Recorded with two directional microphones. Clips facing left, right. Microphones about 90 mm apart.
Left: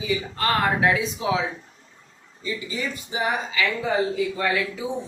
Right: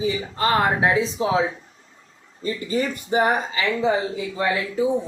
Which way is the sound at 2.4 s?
45° right (ahead or behind).